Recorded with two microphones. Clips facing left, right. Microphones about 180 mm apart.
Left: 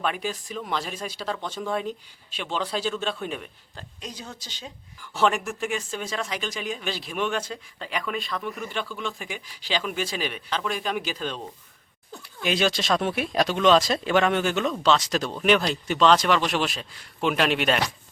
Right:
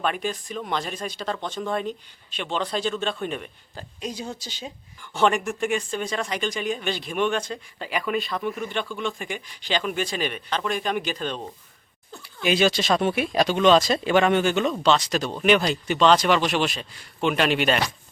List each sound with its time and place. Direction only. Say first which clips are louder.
0.0 s speech: right 2 dB; 5° left (ahead or behind)
4.0 s speech: right 7 dB; 10° right (ahead or behind)
4.9 s speech: right 2 dB; 5° left (ahead or behind)